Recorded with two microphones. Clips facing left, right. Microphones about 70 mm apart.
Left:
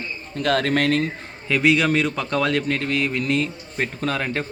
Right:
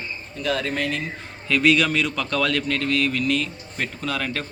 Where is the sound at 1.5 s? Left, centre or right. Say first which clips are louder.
Left 1 dB; left.